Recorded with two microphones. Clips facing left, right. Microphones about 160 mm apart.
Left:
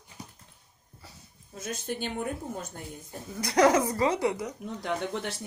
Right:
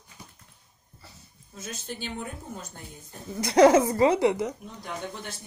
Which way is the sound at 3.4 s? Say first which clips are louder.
Right 5 dB; 25° right (ahead or behind).